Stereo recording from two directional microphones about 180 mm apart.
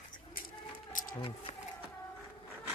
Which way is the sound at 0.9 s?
45° left (ahead or behind).